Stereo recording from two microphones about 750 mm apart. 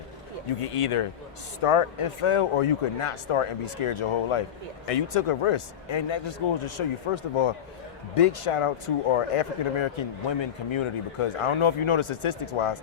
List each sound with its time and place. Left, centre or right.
0.6 s a man's voice: left